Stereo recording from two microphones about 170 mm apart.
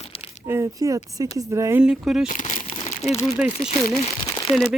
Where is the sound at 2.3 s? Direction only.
50° left (ahead or behind).